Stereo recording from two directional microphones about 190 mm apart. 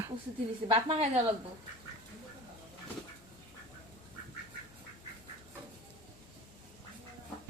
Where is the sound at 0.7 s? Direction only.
30° right (ahead or behind).